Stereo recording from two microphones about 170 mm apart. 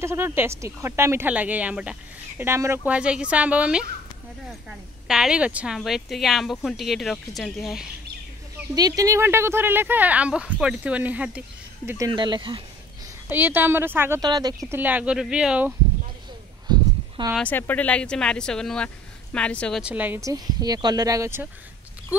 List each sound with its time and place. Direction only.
0.0 s speech: 15° right (ahead or behind); by 7.8 s centre (ahead or behind)
8.7 s speech: 20° right (ahead or behind)
12.1 s a sound: 25° right (ahead or behind)
13.3 s speech: 10° right (ahead or behind)
16.6 s a sound: 25° right (ahead or behind)
17.4 s speech: 10° left (ahead or behind)
19.8 s speech: 10° right (ahead or behind)